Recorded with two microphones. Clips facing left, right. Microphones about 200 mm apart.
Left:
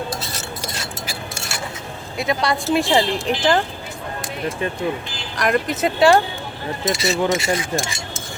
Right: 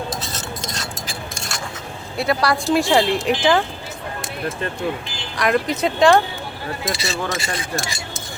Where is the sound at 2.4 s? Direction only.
Centre (ahead or behind).